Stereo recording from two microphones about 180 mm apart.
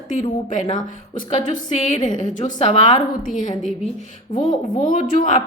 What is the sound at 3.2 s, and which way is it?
Speech, 45° left (ahead or behind).